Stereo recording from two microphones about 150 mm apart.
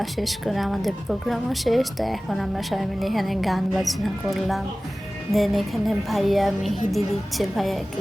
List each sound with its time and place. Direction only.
0.0 s a woman's voice: centre (ahead or behind)